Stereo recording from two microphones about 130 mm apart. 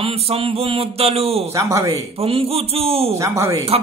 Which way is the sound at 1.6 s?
25° right (ahead or behind).